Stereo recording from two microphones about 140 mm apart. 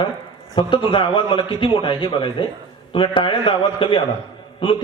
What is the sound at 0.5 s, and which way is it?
A man's voice, 35° left (ahead or behind).